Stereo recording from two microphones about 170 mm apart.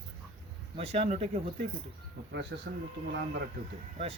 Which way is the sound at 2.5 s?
75° right (ahead or behind).